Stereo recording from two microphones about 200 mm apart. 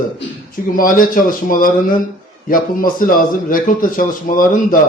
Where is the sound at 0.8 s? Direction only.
45° left (ahead or behind).